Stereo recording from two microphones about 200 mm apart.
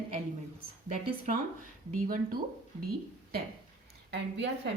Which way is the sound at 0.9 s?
35° right (ahead or behind).